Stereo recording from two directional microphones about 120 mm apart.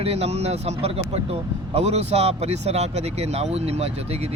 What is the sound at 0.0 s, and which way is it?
A man's voice, 60° right (ahead or behind).